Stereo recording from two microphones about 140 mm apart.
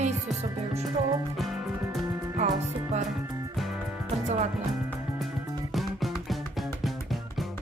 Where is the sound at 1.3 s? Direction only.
Centre (ahead or behind).